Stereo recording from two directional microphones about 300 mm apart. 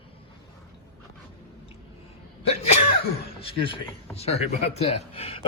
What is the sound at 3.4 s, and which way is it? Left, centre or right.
A man's voice, centre.